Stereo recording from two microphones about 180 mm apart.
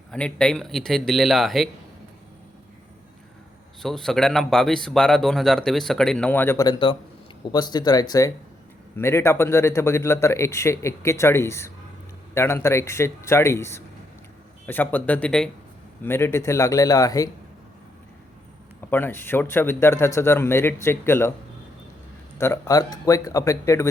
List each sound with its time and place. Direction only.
0.1 s a man's voice: 5° left (ahead or behind)
3.8 s a man's voice: centre (ahead or behind)
6.7 s speech: 30° left (ahead or behind)
18.9 s speech: 10° left (ahead or behind)
22.4 s speech: 15° left (ahead or behind)